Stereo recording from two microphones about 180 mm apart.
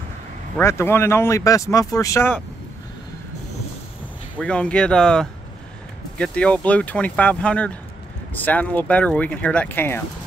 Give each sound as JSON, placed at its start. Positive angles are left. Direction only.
{"t": 0.6, "sound": "speech", "side_deg": 15}
{"t": 4.4, "sound": "speech", "side_deg": 5}